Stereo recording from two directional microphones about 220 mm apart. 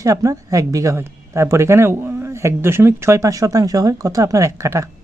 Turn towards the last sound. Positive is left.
turn(degrees=-15)  # may be behind; listen again after turning